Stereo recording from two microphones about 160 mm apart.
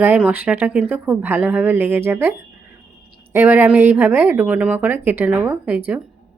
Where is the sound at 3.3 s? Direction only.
10° right (ahead or behind).